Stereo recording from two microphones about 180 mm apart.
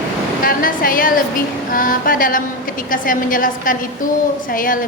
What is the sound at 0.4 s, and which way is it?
A woman's voice, 50° left (ahead or behind).